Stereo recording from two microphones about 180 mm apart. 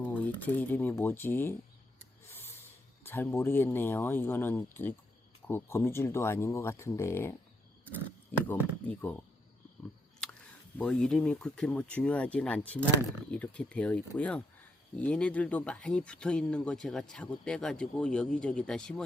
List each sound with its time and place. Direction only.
0.0 s speech: 10° left (ahead or behind)
2.3 s snort: 10° left (ahead or behind)
3.0 s speech: 10° left (ahead or behind)
10.8 s speech: 5° left (ahead or behind)